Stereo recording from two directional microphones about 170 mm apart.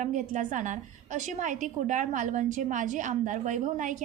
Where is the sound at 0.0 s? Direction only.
45° right (ahead or behind).